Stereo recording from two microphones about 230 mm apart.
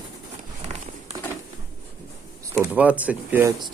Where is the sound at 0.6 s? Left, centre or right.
Right.